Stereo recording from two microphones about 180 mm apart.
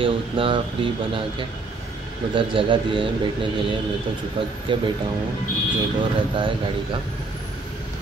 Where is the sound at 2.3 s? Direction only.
30° right (ahead or behind).